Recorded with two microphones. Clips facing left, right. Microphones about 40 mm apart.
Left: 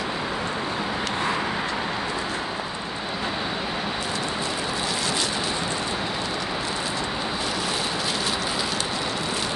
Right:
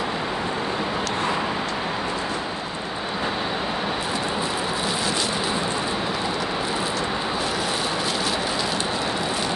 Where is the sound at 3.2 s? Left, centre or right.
Centre.